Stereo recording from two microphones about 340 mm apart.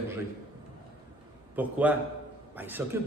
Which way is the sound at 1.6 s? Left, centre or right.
Centre.